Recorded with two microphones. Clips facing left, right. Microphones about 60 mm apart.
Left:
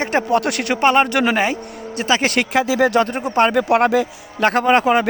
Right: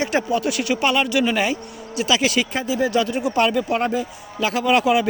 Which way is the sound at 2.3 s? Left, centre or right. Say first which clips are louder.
Left 5 dB; left.